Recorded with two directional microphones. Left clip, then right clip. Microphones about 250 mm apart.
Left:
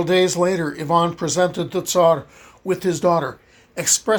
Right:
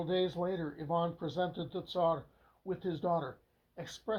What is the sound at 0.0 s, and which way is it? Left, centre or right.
Speech, left.